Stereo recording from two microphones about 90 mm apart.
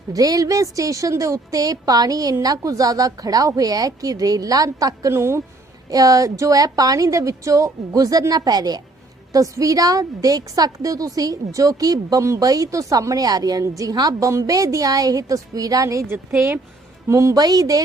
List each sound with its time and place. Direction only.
0.1 s a woman's voice: 40° right (ahead or behind)
5.9 s a woman's voice: 40° right (ahead or behind)
17.1 s a woman's voice: 35° right (ahead or behind)